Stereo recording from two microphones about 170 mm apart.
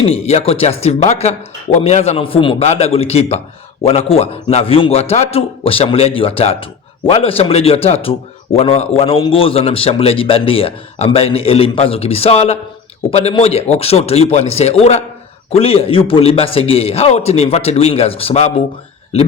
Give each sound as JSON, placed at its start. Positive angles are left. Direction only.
{"t": 0.0, "sound": "a man's voice", "side_deg": 35}